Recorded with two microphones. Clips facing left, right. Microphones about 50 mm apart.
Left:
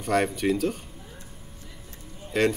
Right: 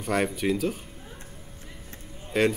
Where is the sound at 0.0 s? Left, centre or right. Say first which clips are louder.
Left 2 dB; centre.